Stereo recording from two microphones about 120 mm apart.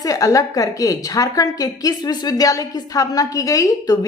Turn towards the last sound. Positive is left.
turn(degrees=30)  # may be behind; listen again after turning